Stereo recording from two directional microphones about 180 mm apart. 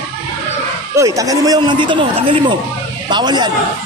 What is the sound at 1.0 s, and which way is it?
Speech, 20° right (ahead or behind).